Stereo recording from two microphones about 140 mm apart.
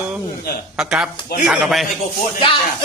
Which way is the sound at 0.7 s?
5° right (ahead or behind).